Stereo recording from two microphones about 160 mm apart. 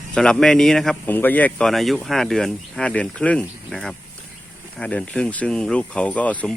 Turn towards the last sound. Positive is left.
turn(degrees=10)  # may be behind; listen again after turning